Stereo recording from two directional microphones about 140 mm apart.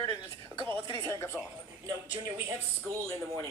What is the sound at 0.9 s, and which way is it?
Speech, 20° left (ahead or behind).